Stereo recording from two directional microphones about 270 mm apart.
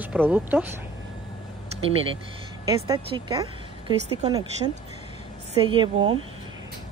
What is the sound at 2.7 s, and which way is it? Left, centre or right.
Speech, centre.